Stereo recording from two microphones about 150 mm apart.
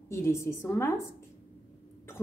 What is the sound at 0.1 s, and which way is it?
Speech, 20° left (ahead or behind).